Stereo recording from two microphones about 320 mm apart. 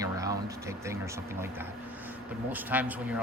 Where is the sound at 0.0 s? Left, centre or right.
Centre.